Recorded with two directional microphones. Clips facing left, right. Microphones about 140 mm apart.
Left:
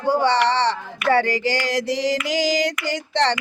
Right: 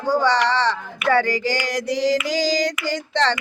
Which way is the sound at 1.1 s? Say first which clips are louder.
Even; 25° left (ahead or behind).